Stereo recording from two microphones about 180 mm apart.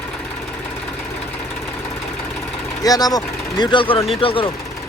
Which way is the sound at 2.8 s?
20° left (ahead or behind).